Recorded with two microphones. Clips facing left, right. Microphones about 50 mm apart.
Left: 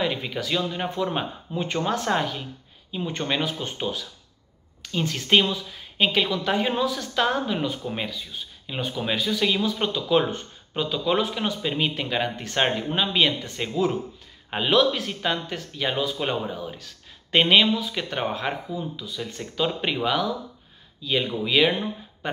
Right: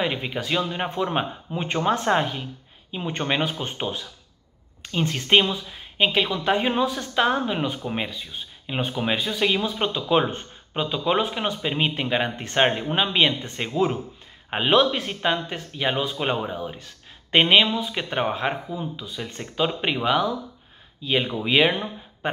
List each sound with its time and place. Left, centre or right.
0.0 s a woman's voice: right